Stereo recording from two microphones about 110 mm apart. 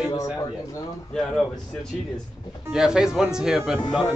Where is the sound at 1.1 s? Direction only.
5° left (ahead or behind).